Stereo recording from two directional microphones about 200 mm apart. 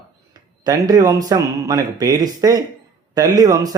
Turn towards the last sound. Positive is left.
turn(degrees=-20)  # may be behind; listen again after turning